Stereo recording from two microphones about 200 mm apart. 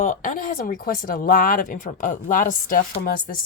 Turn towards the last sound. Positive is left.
turn(degrees=45)  # may be behind; listen again after turning